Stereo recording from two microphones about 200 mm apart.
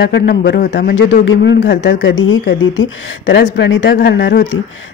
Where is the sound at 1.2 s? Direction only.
60° left (ahead or behind).